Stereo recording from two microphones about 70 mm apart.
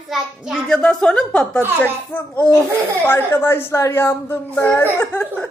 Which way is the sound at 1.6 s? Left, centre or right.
Left.